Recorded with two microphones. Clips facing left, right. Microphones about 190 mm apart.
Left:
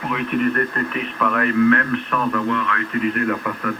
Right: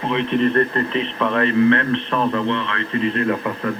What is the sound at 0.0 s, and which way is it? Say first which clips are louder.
A man's voice: right 2 dB; 25° right (ahead or behind).